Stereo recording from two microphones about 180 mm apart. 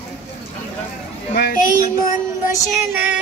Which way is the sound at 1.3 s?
55° left (ahead or behind).